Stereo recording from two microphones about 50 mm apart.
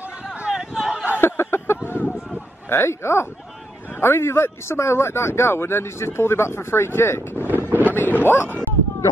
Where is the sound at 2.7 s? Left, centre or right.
Left.